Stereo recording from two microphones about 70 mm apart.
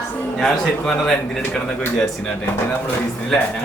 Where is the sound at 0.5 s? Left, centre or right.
Centre.